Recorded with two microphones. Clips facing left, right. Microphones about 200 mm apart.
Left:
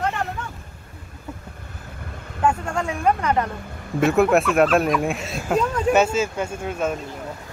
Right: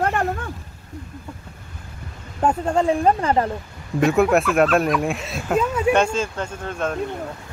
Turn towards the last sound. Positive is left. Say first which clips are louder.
# left 1 dB
turn(degrees=10)  # may be behind; listen again after turning